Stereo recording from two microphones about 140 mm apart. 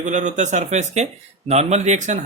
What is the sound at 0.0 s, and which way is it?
Speech, 60° right (ahead or behind).